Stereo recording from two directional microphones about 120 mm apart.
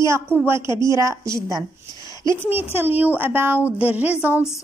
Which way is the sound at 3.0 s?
15° right (ahead or behind).